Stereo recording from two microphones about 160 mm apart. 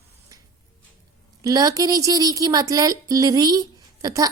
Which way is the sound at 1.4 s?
20° right (ahead or behind).